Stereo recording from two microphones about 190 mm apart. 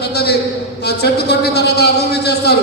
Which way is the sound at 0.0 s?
60° left (ahead or behind).